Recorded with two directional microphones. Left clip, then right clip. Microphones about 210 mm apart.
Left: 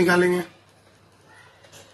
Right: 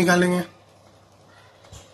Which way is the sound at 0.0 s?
30° right (ahead or behind).